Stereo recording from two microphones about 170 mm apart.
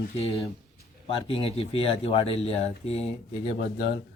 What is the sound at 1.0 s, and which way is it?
Speech, 35° left (ahead or behind).